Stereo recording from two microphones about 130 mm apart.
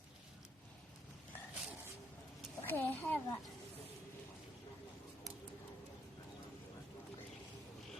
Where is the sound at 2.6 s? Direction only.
15° left (ahead or behind).